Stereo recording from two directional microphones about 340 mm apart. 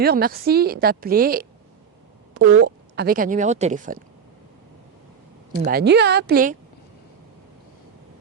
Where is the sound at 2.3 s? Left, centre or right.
Right.